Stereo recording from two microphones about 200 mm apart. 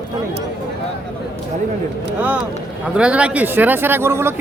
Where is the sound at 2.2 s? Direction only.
10° right (ahead or behind).